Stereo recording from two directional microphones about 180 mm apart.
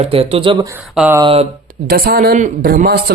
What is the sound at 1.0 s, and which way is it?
Speech, 10° right (ahead or behind).